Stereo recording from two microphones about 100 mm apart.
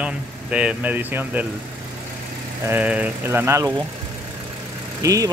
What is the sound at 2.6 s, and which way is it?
Speech, 15° right (ahead or behind).